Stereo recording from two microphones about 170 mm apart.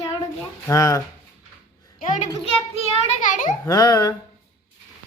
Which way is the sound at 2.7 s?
40° left (ahead or behind).